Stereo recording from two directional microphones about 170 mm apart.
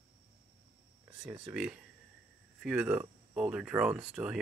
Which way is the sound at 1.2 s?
5° right (ahead or behind).